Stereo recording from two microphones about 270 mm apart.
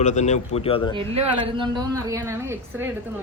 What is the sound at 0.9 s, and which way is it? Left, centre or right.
Speech, right.